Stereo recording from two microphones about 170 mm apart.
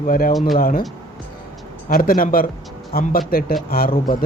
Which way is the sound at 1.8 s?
55° left (ahead or behind).